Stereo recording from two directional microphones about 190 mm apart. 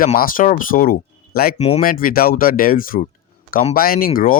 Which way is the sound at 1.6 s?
35° left (ahead or behind).